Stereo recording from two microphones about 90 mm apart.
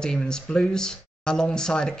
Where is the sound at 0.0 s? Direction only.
10° left (ahead or behind).